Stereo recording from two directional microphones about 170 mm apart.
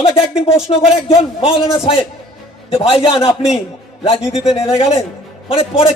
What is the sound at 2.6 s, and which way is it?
Speech, 35° left (ahead or behind).